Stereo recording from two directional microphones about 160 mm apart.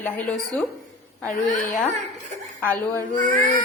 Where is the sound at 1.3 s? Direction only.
55° left (ahead or behind).